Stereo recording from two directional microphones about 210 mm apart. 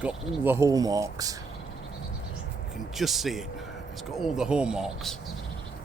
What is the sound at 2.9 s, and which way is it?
Speech, centre (ahead or behind).